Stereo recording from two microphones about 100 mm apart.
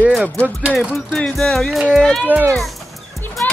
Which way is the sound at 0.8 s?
5° right (ahead or behind).